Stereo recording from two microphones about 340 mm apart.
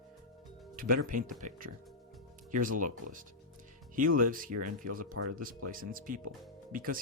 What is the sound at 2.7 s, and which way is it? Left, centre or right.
Speech, right.